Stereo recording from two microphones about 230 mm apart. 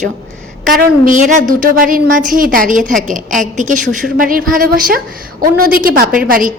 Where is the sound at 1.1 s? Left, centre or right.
Right.